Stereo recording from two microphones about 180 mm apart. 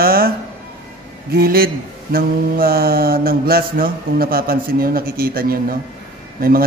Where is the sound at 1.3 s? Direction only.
60° right (ahead or behind).